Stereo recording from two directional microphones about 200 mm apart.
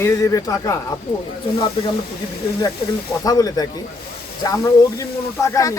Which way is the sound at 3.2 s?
20° left (ahead or behind).